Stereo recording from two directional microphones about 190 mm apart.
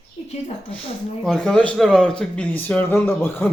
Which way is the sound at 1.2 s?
5° left (ahead or behind).